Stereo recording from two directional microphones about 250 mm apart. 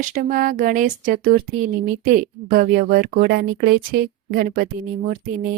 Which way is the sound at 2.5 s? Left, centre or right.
Right.